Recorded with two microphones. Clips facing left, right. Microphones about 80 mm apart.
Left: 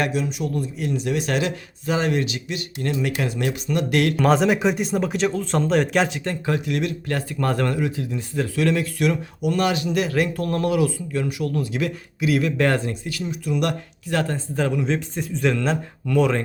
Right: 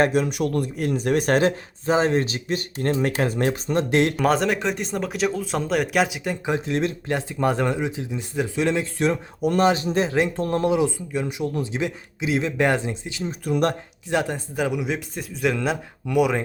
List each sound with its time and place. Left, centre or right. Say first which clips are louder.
0.1 s speech: right 3 dB; right
4.2 s speech: left 3 dB; centre
6.7 s speech: right 1 dB; right
13.4 s speech: right 2 dB; right
14.1 s speech: even; centre